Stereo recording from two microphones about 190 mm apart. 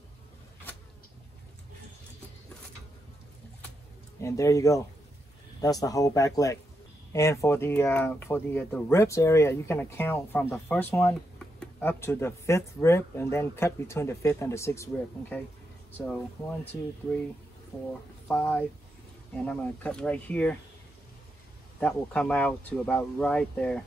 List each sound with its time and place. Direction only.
4.2 s speech: 15° left (ahead or behind)
18.3 s speech: 10° left (ahead or behind)
21.7 s speech: 5° left (ahead or behind)